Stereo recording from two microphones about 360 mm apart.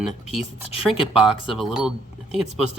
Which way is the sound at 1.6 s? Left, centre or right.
Centre.